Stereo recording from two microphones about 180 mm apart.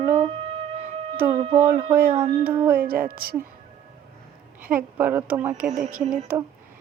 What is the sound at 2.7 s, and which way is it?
Speech, 55° right (ahead or behind).